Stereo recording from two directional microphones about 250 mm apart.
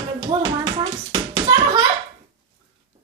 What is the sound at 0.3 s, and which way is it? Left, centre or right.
Hands, centre.